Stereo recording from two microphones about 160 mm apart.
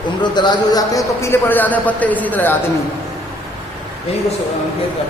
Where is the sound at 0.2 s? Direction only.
25° left (ahead or behind); by 2.6 s 10° left (ahead or behind).